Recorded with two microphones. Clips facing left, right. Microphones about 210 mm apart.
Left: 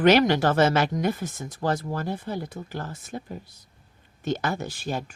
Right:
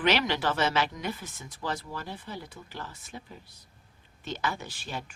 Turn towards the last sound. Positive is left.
turn(degrees=45)  # may be behind; listen again after turning